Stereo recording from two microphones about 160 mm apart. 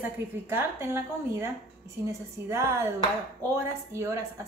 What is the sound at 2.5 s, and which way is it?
A woman's voice, 15° right (ahead or behind).